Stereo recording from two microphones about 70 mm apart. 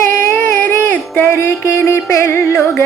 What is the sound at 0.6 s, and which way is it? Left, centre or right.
Music, left.